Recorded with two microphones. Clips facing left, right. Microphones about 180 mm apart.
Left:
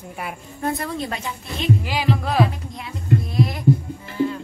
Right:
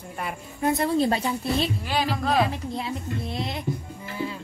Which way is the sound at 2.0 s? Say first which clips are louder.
Left 4 dB; centre (ahead or behind).